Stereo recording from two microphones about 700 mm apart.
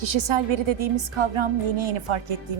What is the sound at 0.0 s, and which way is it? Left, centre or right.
A woman's voice, right.